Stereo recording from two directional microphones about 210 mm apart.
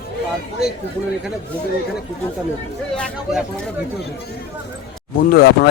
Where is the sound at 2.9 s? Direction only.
5° left (ahead or behind).